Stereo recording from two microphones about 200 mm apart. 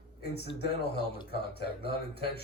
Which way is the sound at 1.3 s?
50° left (ahead or behind).